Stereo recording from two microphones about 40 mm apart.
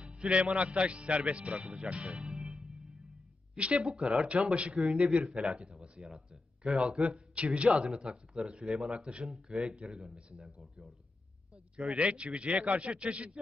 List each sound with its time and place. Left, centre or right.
0.0 s a man's voice: right
3.5 s speech: right
4.0 s speech: centre
4.3 s a man's voice: right
5.2 s speech: centre
5.6 s a sound: right
6.1 s speech: centre
7.4 s a man's voice: right
8.6 s speech: centre
9.9 s a man's voice: right
10.4 s speech: centre
12.0 s a man's voice: right